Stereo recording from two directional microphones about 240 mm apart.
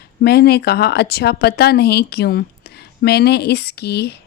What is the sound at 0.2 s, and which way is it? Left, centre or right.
Speech, left.